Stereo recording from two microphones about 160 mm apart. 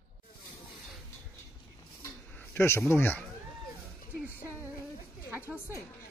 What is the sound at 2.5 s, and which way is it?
Speech, 15° left (ahead or behind).